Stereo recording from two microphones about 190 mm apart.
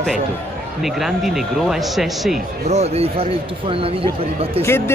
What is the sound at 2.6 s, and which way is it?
Speech, 35° right (ahead or behind).